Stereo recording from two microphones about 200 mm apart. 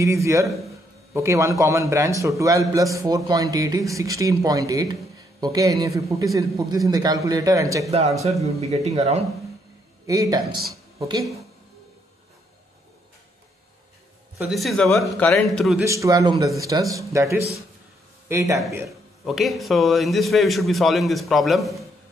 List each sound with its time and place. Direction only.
0.0 s a man's voice: 15° right (ahead or behind)
8.5 s speech: 30° right (ahead or behind)
10.0 s a man's voice: 15° right (ahead or behind)
10.7 s a sound: 15° right (ahead or behind)
14.5 s a man's voice: centre (ahead or behind)
15.8 s a man's voice: 15° right (ahead or behind)
19.2 s a man's voice: centre (ahead or behind)